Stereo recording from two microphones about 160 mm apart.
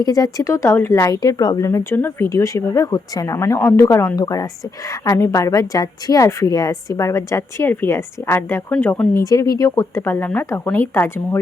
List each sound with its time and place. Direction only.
0.0 s a woman's voice: 25° left (ahead or behind)
9.2 s speech: 20° left (ahead or behind)